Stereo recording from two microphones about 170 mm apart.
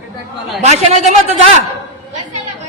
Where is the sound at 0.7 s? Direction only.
35° right (ahead or behind).